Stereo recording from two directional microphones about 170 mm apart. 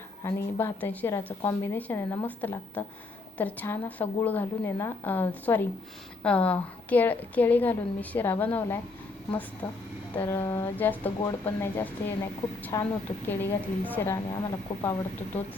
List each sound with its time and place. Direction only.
0.2 s a woman's voice: 15° left (ahead or behind)
10.2 s a woman's voice: 15° left (ahead or behind)